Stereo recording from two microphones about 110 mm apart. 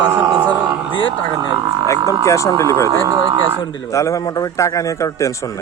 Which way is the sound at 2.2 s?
30° left (ahead or behind).